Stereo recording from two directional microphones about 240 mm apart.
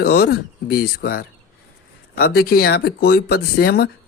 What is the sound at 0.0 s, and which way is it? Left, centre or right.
Speech, left.